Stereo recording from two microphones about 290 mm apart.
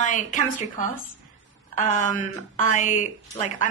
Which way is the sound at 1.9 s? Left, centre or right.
Left.